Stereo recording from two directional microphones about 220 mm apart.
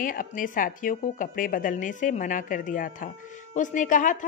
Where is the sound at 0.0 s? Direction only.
40° left (ahead or behind).